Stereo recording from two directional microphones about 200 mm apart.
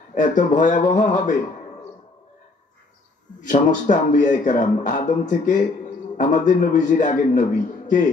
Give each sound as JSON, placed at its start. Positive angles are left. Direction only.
{"t": 0.1, "sound": "a man's voice", "side_deg": 40}
{"t": 3.3, "sound": "a man's voice", "side_deg": 40}